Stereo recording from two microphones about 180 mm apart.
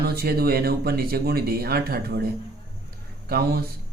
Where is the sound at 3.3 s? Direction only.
60° right (ahead or behind).